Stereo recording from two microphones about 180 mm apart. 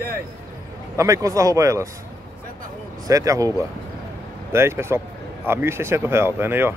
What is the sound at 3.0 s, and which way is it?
Speech, 20° right (ahead or behind).